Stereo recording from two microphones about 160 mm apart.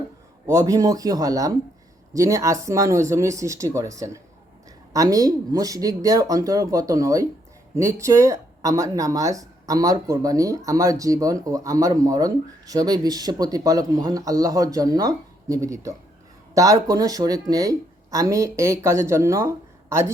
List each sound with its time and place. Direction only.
0.4 s speech: 20° right (ahead or behind)